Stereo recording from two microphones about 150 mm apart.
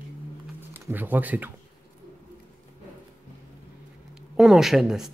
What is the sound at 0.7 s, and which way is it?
Speech, 10° right (ahead or behind).